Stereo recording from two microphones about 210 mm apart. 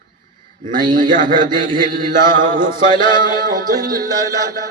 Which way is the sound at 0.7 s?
20° right (ahead or behind).